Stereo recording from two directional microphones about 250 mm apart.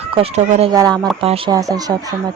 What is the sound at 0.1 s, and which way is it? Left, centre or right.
Speech, right.